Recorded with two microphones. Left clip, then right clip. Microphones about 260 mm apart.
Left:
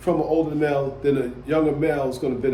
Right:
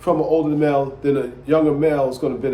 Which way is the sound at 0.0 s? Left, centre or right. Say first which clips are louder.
Right 3 dB; centre.